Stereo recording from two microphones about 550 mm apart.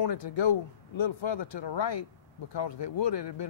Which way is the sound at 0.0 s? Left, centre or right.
Left.